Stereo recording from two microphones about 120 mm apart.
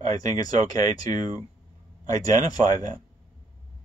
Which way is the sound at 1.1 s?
90° right.